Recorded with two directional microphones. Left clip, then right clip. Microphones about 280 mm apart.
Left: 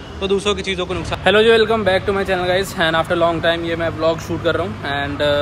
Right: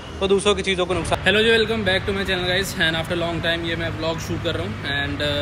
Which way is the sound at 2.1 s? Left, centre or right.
Centre.